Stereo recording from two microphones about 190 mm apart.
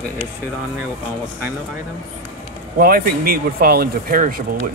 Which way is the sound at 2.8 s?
50° right (ahead or behind).